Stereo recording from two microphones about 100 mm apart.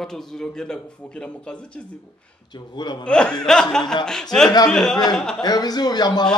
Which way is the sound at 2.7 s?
45° left (ahead or behind).